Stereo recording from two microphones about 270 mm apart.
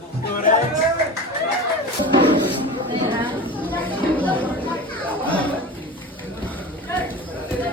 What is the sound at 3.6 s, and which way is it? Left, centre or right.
Chatter, centre.